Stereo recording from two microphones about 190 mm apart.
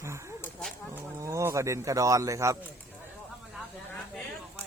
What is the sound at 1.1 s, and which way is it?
Speech, 15° right (ahead or behind).